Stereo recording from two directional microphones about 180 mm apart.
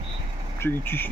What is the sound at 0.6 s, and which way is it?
Speech, 10° left (ahead or behind).